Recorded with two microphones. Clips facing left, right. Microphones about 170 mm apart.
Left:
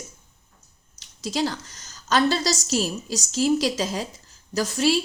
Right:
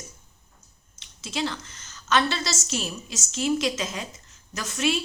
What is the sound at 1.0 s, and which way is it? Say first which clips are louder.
A woman's voice: left 4 dB; 40° left (ahead or behind).